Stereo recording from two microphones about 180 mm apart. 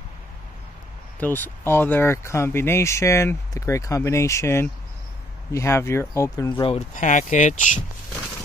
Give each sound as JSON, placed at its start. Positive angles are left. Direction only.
{"t": 1.2, "sound": "speech", "side_deg": 10}
{"t": 7.0, "sound": "speech", "side_deg": 45}